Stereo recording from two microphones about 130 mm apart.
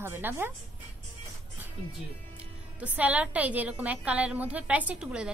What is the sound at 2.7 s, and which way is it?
A woman's voice, 10° right (ahead or behind).